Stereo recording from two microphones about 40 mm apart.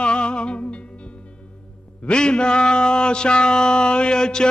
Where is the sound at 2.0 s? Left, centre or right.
Left.